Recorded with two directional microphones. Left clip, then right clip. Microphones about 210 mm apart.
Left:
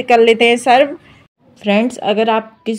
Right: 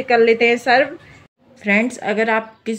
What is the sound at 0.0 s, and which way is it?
Speech, 25° left (ahead or behind).